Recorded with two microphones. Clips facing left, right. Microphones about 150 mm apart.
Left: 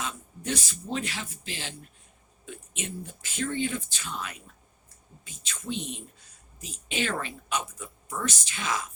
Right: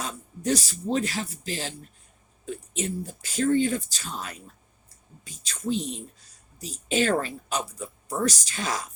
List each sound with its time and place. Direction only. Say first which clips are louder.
0.0 s speech: right 4 dB; 40° right (ahead or behind)